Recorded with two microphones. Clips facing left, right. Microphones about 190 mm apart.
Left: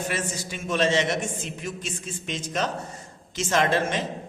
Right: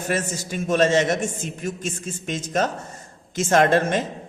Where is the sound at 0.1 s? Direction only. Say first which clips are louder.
Right 5 dB; 45° right (ahead or behind).